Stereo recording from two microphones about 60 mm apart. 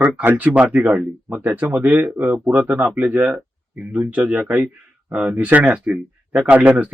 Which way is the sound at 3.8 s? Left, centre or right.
Right.